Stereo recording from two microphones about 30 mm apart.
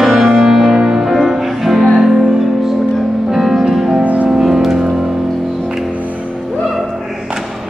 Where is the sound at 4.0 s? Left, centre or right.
Right.